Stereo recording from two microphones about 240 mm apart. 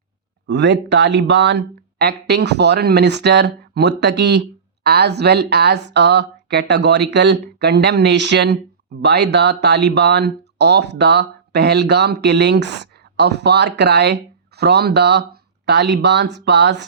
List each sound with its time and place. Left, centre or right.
0.4 s speech: right